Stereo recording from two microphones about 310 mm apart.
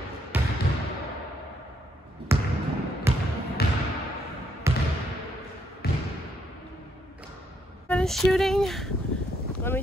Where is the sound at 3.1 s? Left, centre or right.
Centre.